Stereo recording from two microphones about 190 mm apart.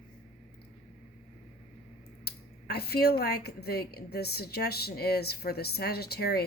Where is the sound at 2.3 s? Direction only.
55° left (ahead or behind).